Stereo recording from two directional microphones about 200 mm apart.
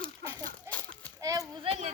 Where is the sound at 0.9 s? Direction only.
15° right (ahead or behind).